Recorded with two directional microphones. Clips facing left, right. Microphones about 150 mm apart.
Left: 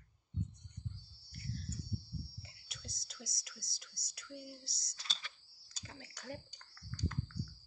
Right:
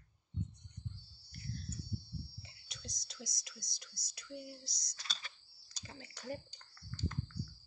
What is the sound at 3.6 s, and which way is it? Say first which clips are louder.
Speech: right 2 dB; 5° left (ahead or behind).